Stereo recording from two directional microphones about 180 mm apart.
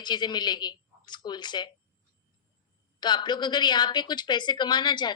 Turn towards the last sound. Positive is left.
turn(degrees=25)  # may be behind; listen again after turning